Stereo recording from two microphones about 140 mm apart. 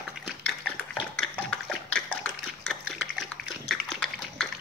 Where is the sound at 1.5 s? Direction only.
5° left (ahead or behind).